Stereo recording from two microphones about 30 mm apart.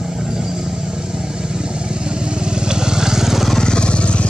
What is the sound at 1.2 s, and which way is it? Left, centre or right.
Vehicle, right.